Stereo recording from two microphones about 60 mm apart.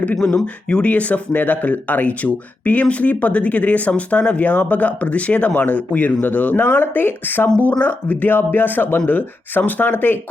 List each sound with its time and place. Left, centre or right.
0.2 s speech: centre; by 10.2 s left